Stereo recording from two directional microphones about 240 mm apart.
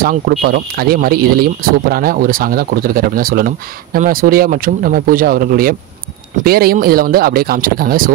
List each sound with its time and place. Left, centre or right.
0.0 s speech: right